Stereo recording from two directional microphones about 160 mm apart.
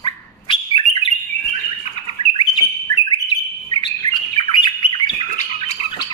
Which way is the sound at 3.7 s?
30° left (ahead or behind).